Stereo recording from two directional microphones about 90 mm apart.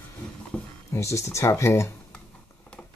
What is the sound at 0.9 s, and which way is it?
Speech, 35° left (ahead or behind).